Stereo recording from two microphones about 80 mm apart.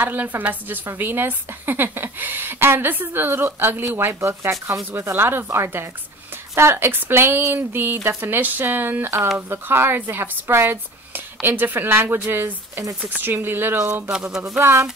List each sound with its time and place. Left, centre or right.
0.0 s speech: right
14.0 s speech: centre
14.6 s speech: right